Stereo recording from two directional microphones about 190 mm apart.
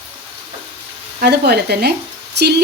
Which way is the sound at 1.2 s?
60° right (ahead or behind).